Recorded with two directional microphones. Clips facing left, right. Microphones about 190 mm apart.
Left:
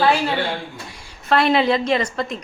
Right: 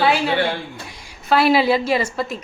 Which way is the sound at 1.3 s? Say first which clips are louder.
Right 1 dB; 5° right (ahead or behind).